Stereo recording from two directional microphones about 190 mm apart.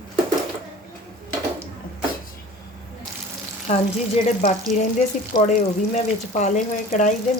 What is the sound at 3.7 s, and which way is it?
Speech, 35° left (ahead or behind).